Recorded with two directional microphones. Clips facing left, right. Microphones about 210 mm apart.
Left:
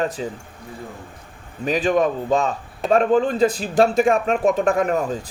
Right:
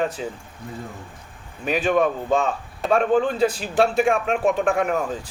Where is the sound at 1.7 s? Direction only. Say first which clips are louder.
Left 1 dB; 40° left (ahead or behind).